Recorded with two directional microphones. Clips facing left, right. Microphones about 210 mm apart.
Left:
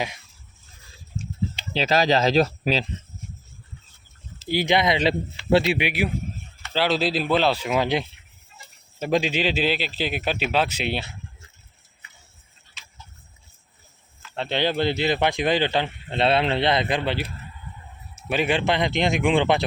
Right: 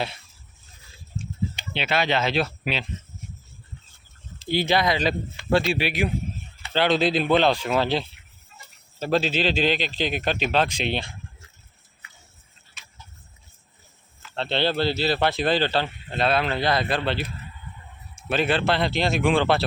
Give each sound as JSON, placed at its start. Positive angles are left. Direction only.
{"t": 1.7, "sound": "speech", "side_deg": 35}
{"t": 4.4, "sound": "a man's voice", "side_deg": 10}
{"t": 14.3, "sound": "speech", "side_deg": 10}
{"t": 18.3, "sound": "speech", "side_deg": 10}